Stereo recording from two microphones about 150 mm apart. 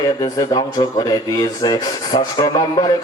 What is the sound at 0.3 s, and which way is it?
A man's voice, 25° left (ahead or behind).